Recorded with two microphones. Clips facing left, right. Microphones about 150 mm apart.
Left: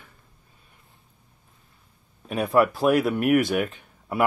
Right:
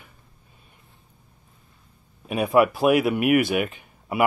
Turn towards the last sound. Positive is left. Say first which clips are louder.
# right 1 dB
turn(degrees=-5)  # may be behind; listen again after turning